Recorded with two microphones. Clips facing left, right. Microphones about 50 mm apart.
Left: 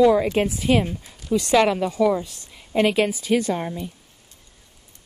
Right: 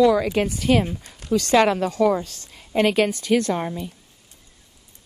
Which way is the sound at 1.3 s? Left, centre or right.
Centre.